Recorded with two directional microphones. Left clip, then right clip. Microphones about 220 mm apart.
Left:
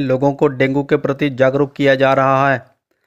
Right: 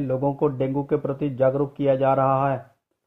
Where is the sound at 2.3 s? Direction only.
65° left (ahead or behind).